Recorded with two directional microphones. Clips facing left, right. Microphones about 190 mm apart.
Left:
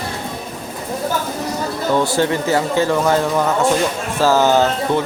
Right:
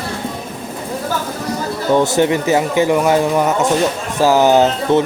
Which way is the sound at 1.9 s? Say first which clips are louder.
Right 4 dB; 20° right (ahead or behind).